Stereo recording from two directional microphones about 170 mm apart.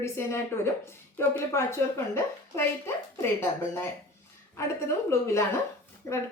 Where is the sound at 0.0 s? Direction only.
15° left (ahead or behind).